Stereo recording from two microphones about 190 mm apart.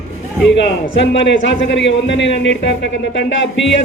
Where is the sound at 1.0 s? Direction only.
75° left (ahead or behind).